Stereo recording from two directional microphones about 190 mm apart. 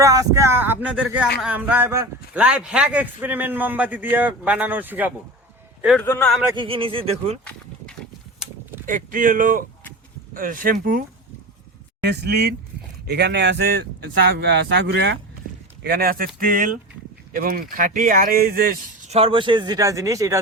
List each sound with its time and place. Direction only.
0.0 s a man's voice: 15° right (ahead or behind)
6.0 s speech: 10° left (ahead or behind)
6.5 s speech: 25° right (ahead or behind)
8.9 s speech: 45° right (ahead or behind)
12.0 s speech: 60° right (ahead or behind)
15.8 s speech: 55° right (ahead or behind)
19.1 s speech: 30° right (ahead or behind)